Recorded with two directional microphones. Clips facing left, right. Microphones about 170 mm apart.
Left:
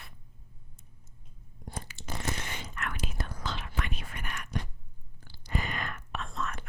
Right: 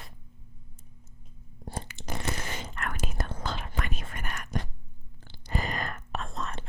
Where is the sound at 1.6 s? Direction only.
30° right (ahead or behind).